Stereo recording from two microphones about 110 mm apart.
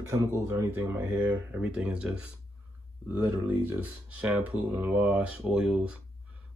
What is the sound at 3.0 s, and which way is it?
Speech, 20° right (ahead or behind).